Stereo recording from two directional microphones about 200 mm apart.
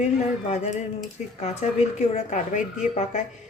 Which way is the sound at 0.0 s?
35° left (ahead or behind).